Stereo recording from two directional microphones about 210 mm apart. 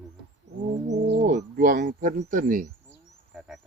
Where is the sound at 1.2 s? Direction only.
40° right (ahead or behind).